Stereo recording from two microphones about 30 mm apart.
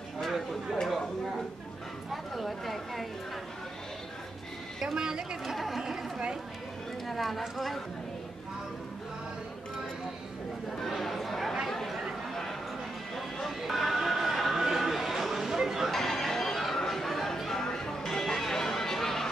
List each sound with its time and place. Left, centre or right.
2.3 s speech: centre
4.9 s a woman's voice: right
5.5 s chatter: centre
7.1 s speech: centre
10.8 s chatter: centre
13.1 s clip-clop: centre
13.6 s music: centre
14.5 s a sound: centre
15.9 s a sound: centre
17.6 s music: centre